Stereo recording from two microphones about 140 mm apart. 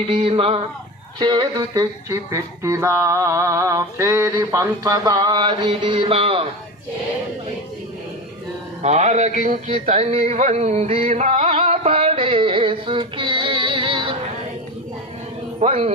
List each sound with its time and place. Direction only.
0.1 s speech: 40° right (ahead or behind)
8.8 s speech: 50° right (ahead or behind)
9.8 s music: 50° right (ahead or behind)
15.6 s speech: 50° right (ahead or behind)